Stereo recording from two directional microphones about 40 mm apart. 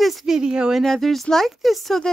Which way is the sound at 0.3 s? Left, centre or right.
Right.